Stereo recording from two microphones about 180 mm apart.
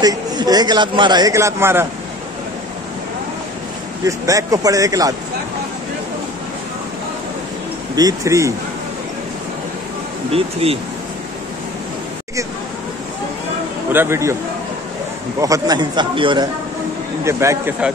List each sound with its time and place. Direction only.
0.0 s a man's voice: 20° right (ahead or behind)
4.0 s a man's voice: 20° right (ahead or behind)
7.9 s speech: 20° right (ahead or behind)
10.3 s speech: 30° right (ahead or behind)
13.9 s speech: 15° right (ahead or behind)
15.4 s a man's voice: 20° right (ahead or behind)
17.2 s speech: 15° right (ahead or behind)